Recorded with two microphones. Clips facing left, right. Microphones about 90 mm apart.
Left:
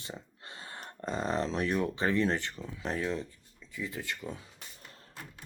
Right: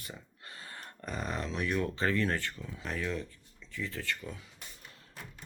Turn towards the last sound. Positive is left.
turn(degrees=25)  # may be behind; listen again after turning